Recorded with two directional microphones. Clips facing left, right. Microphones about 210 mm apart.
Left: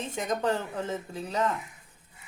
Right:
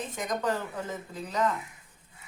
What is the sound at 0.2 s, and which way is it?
Speech, 30° left (ahead or behind).